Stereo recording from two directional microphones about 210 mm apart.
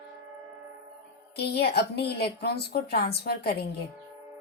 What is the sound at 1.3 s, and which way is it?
A woman's voice, 50° left (ahead or behind).